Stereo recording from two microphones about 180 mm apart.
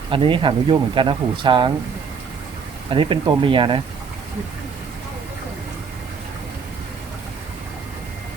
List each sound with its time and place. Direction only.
0.1 s speech: 30° right (ahead or behind)
2.9 s speech: 30° right (ahead or behind)